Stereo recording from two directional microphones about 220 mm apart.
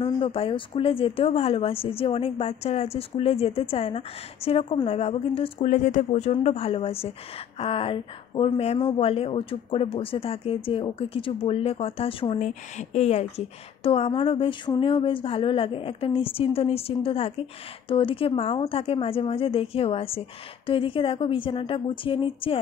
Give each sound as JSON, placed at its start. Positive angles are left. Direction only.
{"t": 0.0, "sound": "speech", "side_deg": 25}